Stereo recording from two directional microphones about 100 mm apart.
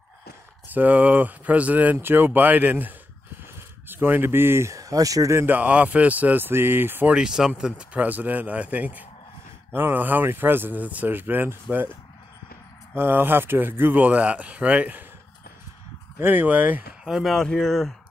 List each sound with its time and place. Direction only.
0.7 s speech: 15° right (ahead or behind)
7.2 s speech: 5° right (ahead or behind)
12.9 s speech: 20° right (ahead or behind)
16.2 s speech: 20° right (ahead or behind)
17.0 s speech: centre (ahead or behind)